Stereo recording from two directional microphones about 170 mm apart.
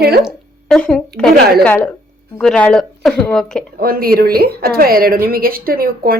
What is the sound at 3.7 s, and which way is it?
Speech, 60° right (ahead or behind).